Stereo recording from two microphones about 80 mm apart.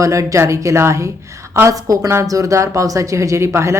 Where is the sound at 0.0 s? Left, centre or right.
Right.